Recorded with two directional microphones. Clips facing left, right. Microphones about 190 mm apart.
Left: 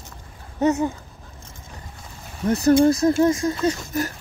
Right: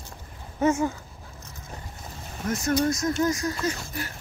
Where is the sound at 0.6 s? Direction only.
20° left (ahead or behind).